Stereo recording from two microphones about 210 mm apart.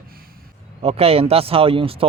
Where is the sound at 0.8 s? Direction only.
30° right (ahead or behind).